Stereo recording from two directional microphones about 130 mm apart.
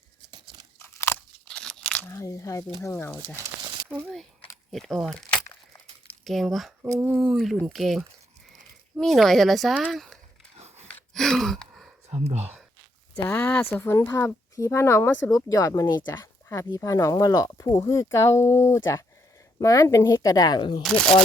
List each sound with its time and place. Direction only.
0.8 s crunch: 20° left (ahead or behind)
1.5 s crunch: 5° left (ahead or behind)
2.0 s speech: 25° left (ahead or behind)
4.0 s speech: centre (ahead or behind)
10.8 s gasp: centre (ahead or behind)
12.1 s speech: 55° right (ahead or behind)
13.2 s speech: 15° left (ahead or behind)
15.3 s speech: 25° left (ahead or behind)
16.2 s a sound: 20° left (ahead or behind)
16.6 s speech: 25° left (ahead or behind)
20.8 s speech: 5° left (ahead or behind)